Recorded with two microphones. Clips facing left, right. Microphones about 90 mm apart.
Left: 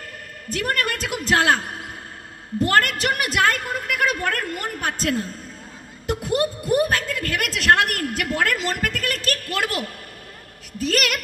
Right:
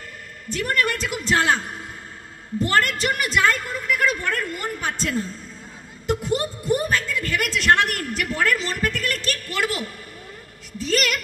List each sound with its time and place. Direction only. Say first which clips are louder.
0.5 s a woman's voice: right 1 dB; 45° left (ahead or behind)
6.2 s speech: left 4 dB; 5° left (ahead or behind)
6.9 s a woman's voice: even; 50° left (ahead or behind)